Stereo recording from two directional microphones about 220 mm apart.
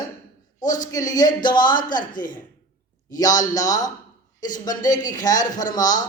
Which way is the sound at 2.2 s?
35° left (ahead or behind).